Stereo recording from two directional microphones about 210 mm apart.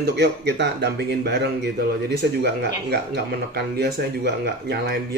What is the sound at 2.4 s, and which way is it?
Speech, 50° right (ahead or behind).